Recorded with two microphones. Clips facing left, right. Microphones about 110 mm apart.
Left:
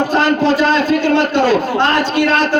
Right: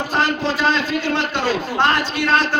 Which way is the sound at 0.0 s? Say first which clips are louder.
Left 7 dB; 50° left (ahead or behind).